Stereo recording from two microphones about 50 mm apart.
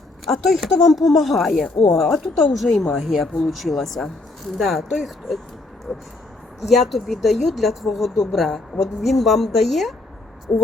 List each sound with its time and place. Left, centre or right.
0.3 s speech: centre
5.9 s speech: left
6.6 s speech: centre